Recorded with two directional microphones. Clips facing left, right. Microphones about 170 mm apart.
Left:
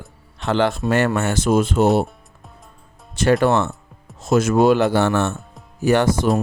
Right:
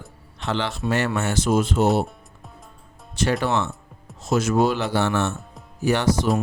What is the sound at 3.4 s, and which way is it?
Speech, 50° left (ahead or behind).